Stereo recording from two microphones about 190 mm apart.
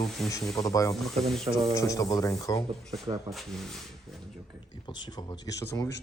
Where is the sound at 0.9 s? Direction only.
Centre (ahead or behind).